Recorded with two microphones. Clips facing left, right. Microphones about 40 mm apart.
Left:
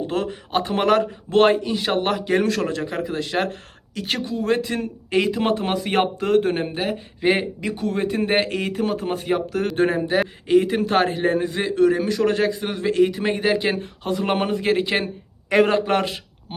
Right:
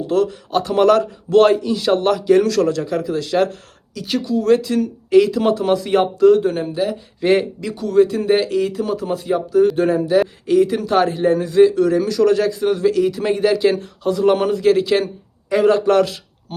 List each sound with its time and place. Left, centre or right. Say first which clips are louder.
0.1 s speech: right 9 dB; left
3.9 s speech: right 4 dB; left
4.4 s speech: right 8 dB; left
5.9 s speech: right 6 dB; left
7.2 s speech: right 4 dB; centre
7.6 s speech: right 8 dB; left
9.7 s speech: right 4 dB; left
12.9 s speech: right 2 dB; left
15.4 s a man's voice: right 2 dB; left
15.7 s a man's voice: right 6 dB; left